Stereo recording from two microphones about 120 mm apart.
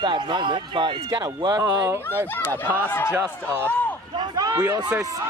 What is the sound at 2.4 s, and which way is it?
Speech, 15° left (ahead or behind).